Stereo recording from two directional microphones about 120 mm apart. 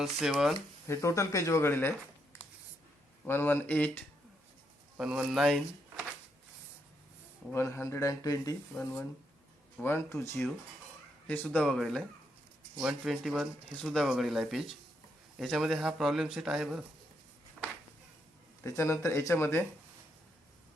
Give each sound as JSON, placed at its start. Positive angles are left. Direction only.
{"t": 0.0, "sound": "speech", "side_deg": -5}
{"t": 0.9, "sound": "speech", "side_deg": 25}
{"t": 3.2, "sound": "speech", "side_deg": 20}
{"t": 4.9, "sound": "speech", "side_deg": -5}
{"t": 7.5, "sound": "speech", "side_deg": 25}
{"t": 8.7, "sound": "speech", "side_deg": 15}
{"t": 11.3, "sound": "speech", "side_deg": 10}
{"t": 18.6, "sound": "speech", "side_deg": 25}